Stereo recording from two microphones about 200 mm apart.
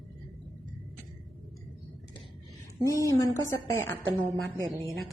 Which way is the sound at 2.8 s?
15° left (ahead or behind).